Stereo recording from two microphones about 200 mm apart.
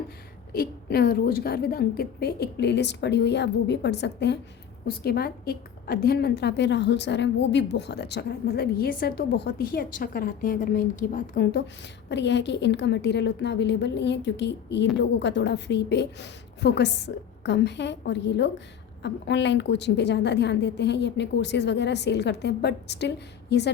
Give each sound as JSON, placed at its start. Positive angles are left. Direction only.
{"t": 0.5, "sound": "a woman's voice", "side_deg": 50}
{"t": 12.0, "sound": "a woman's voice", "side_deg": 60}